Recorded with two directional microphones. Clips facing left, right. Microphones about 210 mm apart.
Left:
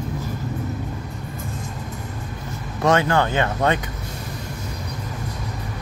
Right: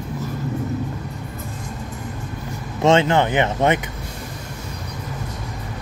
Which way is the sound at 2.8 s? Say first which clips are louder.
Right 3 dB; 25° right (ahead or behind).